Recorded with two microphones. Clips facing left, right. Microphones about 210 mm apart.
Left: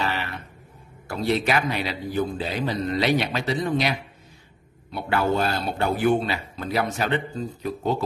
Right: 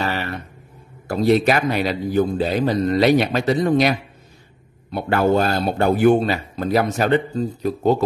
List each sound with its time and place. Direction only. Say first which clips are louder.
0.0 s a sound: right 4 dB; 45° right (ahead or behind)
1.0 s speech: right 7 dB; 40° right (ahead or behind)
4.9 s speech: right 6 dB; 45° right (ahead or behind)